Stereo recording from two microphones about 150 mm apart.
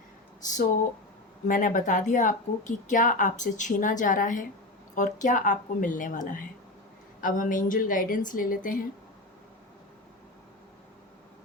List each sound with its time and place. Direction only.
1.5 s a woman's voice: 60° left (ahead or behind)